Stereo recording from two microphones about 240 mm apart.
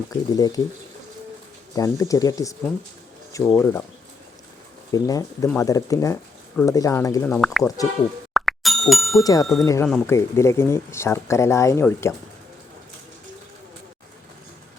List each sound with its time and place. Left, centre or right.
0.1 s speech: centre
1.7 s speech: centre
4.9 s speech: centre
7.3 s speech: centre
8.3 s plop: centre
9.2 s speech: centre